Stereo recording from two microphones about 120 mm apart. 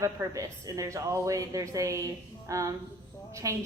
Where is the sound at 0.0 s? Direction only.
30° right (ahead or behind).